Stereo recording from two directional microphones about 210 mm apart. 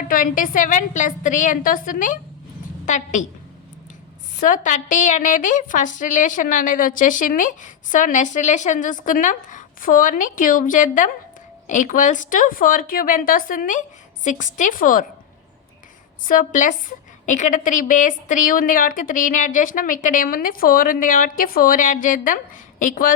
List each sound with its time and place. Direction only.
0.1 s a woman's voice: 40° left (ahead or behind)
4.4 s a woman's voice: 40° left (ahead or behind)
16.2 s a woman's voice: 40° left (ahead or behind)